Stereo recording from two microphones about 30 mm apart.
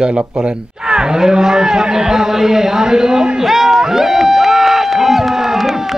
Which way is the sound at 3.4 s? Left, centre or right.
Centre.